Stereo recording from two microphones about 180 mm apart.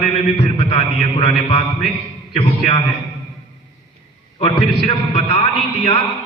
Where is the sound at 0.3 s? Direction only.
35° left (ahead or behind).